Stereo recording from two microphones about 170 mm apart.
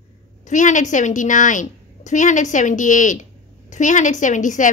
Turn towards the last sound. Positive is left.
turn(degrees=50)  # may be behind; listen again after turning